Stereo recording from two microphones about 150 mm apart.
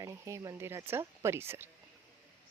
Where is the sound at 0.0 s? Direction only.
20° right (ahead or behind).